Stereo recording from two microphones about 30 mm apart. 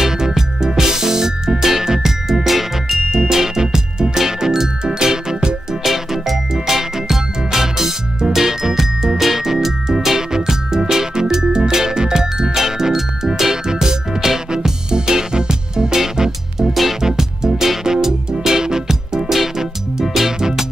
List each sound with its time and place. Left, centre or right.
0.0 s music: centre
3.3 s music: centre
5.9 s music: centre
19.2 s music: centre